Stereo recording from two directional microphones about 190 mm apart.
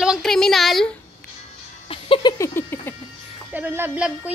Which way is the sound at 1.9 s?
25° left (ahead or behind).